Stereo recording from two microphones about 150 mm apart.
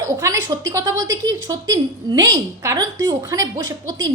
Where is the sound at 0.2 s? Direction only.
20° right (ahead or behind).